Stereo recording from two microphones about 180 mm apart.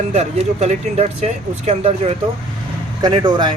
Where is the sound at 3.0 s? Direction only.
25° right (ahead or behind).